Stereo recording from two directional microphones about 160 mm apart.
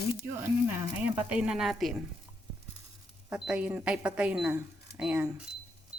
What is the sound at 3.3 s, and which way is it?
Speech, 5° right (ahead or behind).